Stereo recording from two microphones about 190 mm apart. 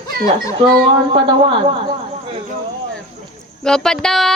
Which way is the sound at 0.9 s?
25° right (ahead or behind).